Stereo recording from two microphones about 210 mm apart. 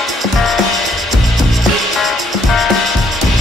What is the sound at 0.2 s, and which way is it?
Music, centre (ahead or behind).